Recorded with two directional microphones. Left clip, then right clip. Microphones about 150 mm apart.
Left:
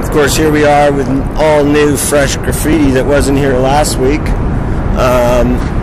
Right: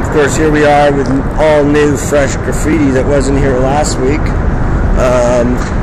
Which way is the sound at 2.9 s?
25° left (ahead or behind).